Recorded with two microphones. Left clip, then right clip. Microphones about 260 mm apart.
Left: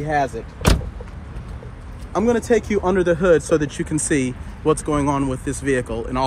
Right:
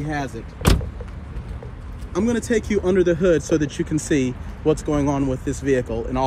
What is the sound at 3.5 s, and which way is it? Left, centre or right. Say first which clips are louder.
Speech: left 2 dB; centre.